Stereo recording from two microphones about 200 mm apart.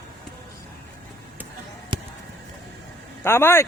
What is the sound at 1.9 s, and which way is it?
Basketball bounce, 25° right (ahead or behind).